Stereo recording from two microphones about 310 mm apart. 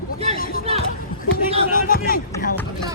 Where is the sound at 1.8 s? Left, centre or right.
Left.